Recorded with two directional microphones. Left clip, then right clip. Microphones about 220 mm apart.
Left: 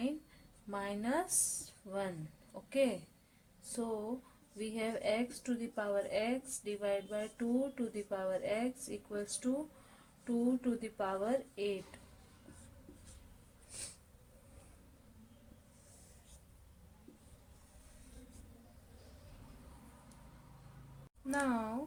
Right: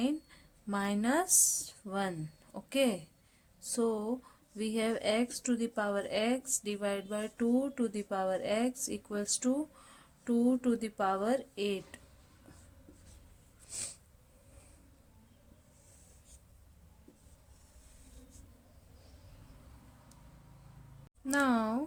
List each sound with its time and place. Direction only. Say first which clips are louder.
0.0 s a woman's voice: right 6 dB; 45° right (ahead or behind)
21.2 s speech: right 6 dB; 45° right (ahead or behind)